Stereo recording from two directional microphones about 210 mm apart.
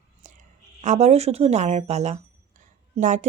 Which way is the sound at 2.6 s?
35° right (ahead or behind).